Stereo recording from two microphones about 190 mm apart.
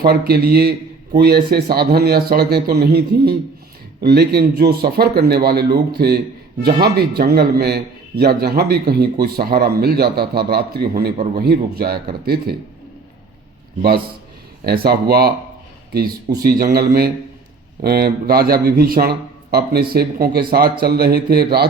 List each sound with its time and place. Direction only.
0.0 s a man's voice: 55° right (ahead or behind)
14.6 s a man's voice: 55° right (ahead or behind)